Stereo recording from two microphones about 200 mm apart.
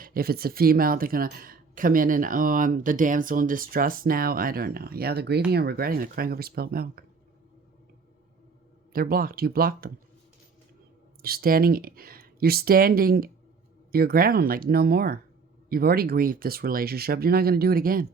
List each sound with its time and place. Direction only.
0.0 s speech: 45° right (ahead or behind)
8.9 s speech: 50° right (ahead or behind)
11.2 s speech: 50° right (ahead or behind)